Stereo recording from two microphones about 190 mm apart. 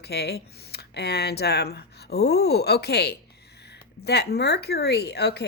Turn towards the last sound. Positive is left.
turn(degrees=60)  # may be behind; listen again after turning